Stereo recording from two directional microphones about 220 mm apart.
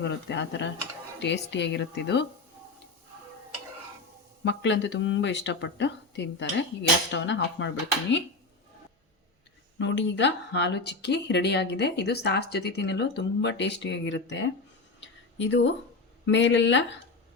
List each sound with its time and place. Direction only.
0.0 s speech: 50° left (ahead or behind)
4.4 s speech: 55° left (ahead or behind)
9.7 s speech: 55° left (ahead or behind)